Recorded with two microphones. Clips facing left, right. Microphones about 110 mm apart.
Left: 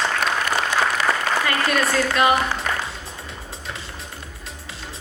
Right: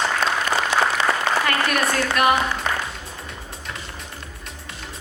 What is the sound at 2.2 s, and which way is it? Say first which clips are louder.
Speech: even; 25° left (ahead or behind).